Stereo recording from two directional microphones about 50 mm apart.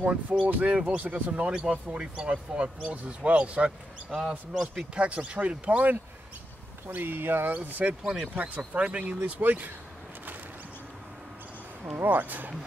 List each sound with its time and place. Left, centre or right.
0.0 s speech: right
4.1 s a man's voice: centre
5.0 s speech: right
6.9 s speech: right
7.5 s speech: right
12.0 s speech: right